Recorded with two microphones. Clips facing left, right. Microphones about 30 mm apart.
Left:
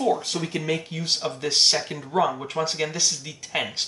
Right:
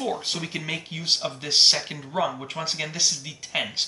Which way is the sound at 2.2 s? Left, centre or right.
Centre.